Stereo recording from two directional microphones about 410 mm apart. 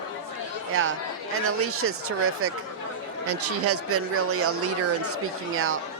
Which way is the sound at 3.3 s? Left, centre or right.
Right.